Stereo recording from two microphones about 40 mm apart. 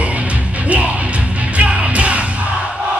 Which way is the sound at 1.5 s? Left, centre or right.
Right.